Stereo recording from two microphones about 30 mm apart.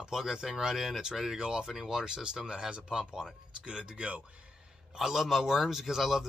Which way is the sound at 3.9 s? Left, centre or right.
Right.